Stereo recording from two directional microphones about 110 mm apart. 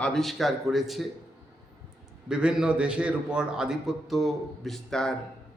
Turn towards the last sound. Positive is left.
turn(degrees=5)  # may be behind; listen again after turning